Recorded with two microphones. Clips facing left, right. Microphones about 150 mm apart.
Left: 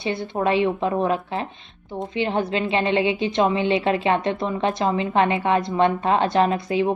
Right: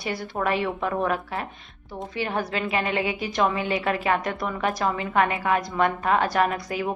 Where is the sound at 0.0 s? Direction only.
25° left (ahead or behind).